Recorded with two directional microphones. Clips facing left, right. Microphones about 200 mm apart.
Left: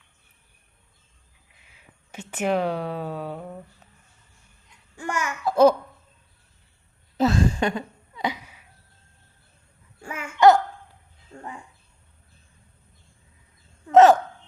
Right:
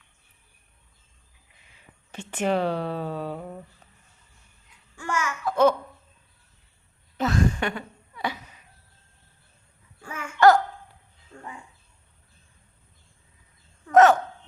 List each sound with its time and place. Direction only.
1.7 s speech: 10° left (ahead or behind)
4.9 s babbling: 15° left (ahead or behind)
5.5 s babbling: 35° left (ahead or behind)
7.2 s a sound: 30° left (ahead or behind); by 8.6 s 10° left (ahead or behind)
10.1 s a sound: 20° left (ahead or behind)
13.8 s hiccup: 30° left (ahead or behind)